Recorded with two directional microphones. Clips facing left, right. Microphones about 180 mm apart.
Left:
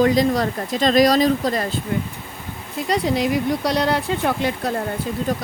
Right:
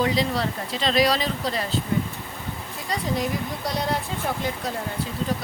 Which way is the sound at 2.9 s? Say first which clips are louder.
Left 6 dB; 80° left.